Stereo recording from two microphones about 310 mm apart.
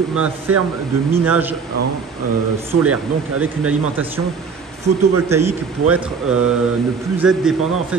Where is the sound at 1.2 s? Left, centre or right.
Centre.